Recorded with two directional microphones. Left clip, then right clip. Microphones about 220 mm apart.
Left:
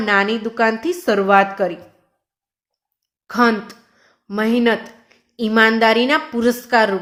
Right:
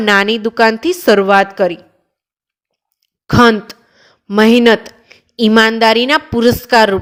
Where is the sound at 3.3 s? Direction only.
40° right (ahead or behind).